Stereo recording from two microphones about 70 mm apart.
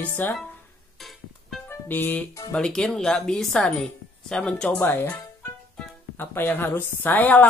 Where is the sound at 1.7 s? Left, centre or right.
Left.